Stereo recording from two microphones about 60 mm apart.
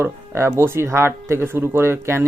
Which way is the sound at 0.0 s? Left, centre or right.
Right.